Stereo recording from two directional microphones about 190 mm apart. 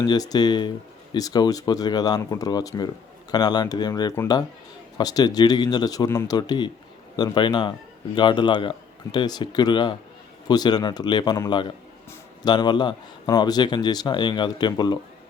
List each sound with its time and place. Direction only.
0.0 s speech: 20° left (ahead or behind)